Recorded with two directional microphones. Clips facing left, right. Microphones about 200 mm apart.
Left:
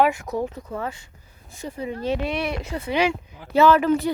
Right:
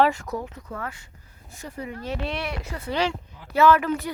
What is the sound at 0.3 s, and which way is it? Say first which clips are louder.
Speech: left 5 dB; 30° left (ahead or behind).